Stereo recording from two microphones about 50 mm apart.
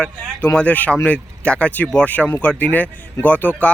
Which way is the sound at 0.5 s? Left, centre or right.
Left.